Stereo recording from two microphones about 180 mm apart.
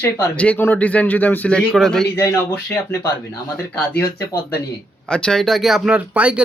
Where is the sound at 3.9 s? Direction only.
15° left (ahead or behind).